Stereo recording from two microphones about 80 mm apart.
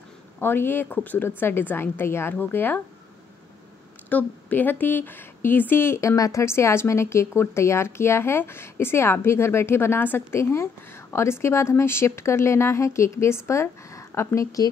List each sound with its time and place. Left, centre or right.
0.4 s a woman's voice: left
4.1 s a woman's voice: left